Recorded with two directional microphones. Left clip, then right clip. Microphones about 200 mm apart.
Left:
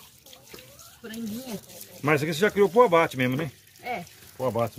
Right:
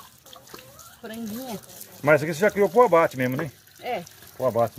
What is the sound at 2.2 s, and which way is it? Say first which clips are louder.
Speech: right 1 dB; 30° left (ahead or behind).